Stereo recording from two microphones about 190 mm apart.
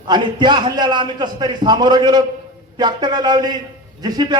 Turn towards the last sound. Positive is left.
turn(degrees=-20)  # may be behind; listen again after turning